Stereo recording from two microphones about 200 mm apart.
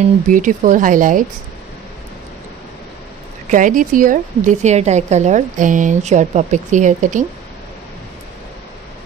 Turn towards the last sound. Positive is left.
turn(degrees=-40)  # may be behind; listen again after turning